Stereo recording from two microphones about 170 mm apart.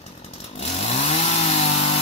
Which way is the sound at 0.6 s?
40° left (ahead or behind).